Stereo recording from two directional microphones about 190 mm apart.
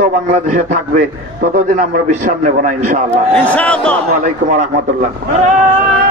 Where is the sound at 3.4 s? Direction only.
10° left (ahead or behind).